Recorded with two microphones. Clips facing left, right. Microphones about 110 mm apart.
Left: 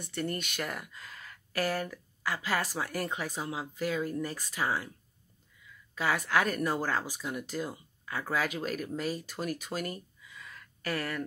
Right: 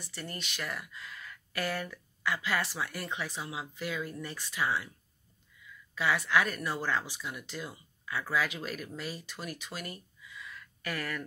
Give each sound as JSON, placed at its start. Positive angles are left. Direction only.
{"t": 0.0, "sound": "speech", "side_deg": 50}
{"t": 5.9, "sound": "speech", "side_deg": 40}